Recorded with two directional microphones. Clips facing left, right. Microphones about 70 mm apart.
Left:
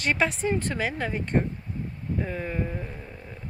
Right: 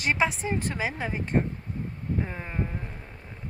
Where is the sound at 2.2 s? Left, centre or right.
Right.